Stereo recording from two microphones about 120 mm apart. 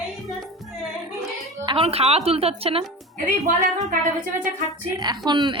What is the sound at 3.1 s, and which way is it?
Speech, 90° right.